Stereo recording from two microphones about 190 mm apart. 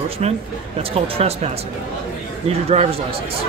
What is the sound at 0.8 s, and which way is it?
Speech, 30° right (ahead or behind).